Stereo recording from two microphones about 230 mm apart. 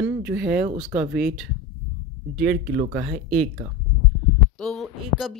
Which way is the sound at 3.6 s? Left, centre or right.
Centre.